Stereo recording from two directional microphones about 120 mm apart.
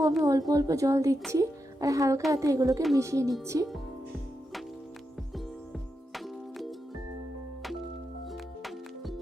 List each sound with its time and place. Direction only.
0.3 s a child's voice: 30° right (ahead or behind)
6.1 s music: centre (ahead or behind)
8.3 s music: centre (ahead or behind)